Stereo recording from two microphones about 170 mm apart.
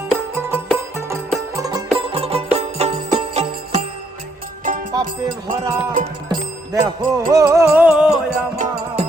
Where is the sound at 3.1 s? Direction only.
40° right (ahead or behind).